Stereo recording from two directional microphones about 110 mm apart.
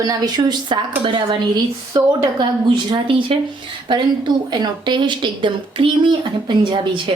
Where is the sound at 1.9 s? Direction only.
45° right (ahead or behind).